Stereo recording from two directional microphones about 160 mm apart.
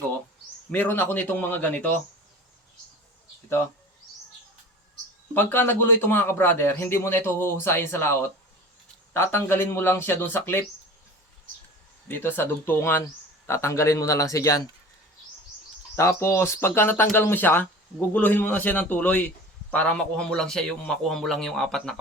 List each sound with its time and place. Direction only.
0.7 s a man's voice: 10° left (ahead or behind)
5.3 s a man's voice: 10° left (ahead or behind)
12.0 s a man's voice: 15° left (ahead or behind)
16.0 s a man's voice: 15° left (ahead or behind)